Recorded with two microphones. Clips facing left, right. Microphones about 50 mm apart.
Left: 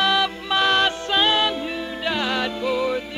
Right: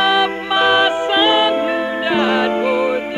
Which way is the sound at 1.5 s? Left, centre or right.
Right.